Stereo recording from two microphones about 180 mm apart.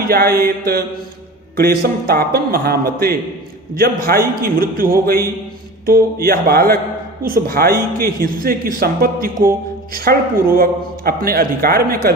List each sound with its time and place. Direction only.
0.0 s a man's voice: 55° right (ahead or behind)